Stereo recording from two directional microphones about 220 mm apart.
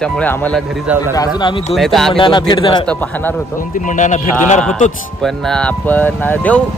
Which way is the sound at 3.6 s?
35° left (ahead or behind).